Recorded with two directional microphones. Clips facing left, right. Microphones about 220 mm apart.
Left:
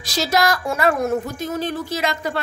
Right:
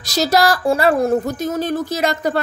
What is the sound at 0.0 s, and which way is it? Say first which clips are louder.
Speech: right 4 dB; 40° right (ahead or behind).